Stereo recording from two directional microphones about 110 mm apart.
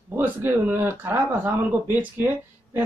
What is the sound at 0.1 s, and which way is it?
Speech, 20° right (ahead or behind).